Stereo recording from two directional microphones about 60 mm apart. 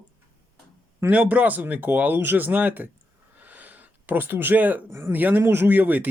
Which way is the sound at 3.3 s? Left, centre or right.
Right.